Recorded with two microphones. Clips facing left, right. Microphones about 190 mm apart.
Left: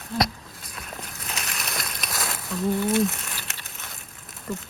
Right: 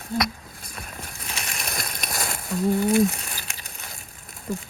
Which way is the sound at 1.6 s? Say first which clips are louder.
Right 1 dB; 50° right (ahead or behind).